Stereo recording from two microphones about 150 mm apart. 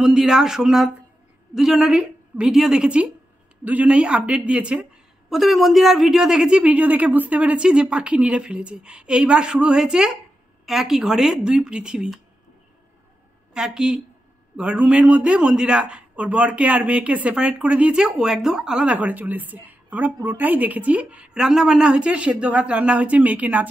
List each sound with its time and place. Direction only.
0.0 s a man's voice: 5° right (ahead or behind)
13.5 s a man's voice: 5° right (ahead or behind)